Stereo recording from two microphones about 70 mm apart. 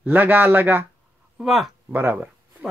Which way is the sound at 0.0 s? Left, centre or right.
Right.